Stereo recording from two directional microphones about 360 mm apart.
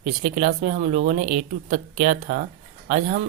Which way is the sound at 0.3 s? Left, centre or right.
Centre.